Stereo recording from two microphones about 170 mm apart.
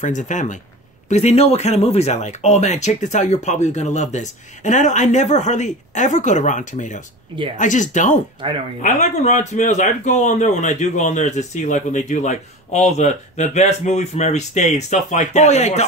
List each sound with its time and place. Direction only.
0.0 s a man's voice: 45° left (ahead or behind)